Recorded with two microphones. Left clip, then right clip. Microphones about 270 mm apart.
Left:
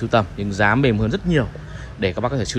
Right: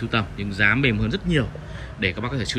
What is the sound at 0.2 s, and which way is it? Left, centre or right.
Speech, centre.